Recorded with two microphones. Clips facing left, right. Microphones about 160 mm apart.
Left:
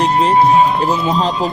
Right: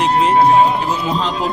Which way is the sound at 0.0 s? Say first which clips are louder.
Left 1 dB; 35° left (ahead or behind).